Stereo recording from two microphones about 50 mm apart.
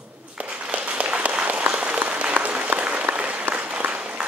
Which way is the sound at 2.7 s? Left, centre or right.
Right.